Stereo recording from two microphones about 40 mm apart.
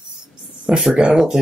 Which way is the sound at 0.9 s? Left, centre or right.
Right.